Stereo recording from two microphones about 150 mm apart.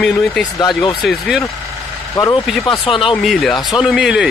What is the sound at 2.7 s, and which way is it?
Speech, 35° left (ahead or behind).